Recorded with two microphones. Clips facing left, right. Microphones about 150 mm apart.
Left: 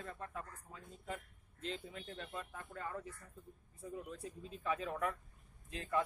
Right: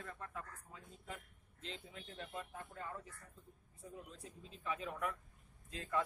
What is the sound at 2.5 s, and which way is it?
Speech, 65° left (ahead or behind).